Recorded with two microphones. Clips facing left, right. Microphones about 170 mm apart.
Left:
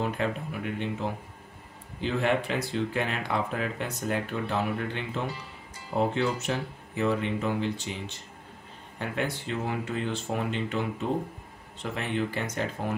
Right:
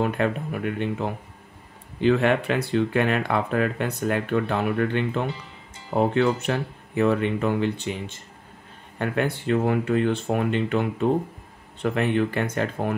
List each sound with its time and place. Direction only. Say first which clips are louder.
0.0 s speech: right 6 dB; 55° right (ahead or behind)